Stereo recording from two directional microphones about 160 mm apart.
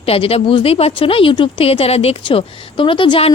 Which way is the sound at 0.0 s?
35° left (ahead or behind).